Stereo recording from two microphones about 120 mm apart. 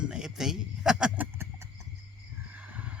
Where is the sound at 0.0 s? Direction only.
5° right (ahead or behind).